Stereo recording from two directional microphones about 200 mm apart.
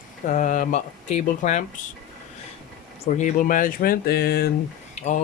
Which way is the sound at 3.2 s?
40° left (ahead or behind).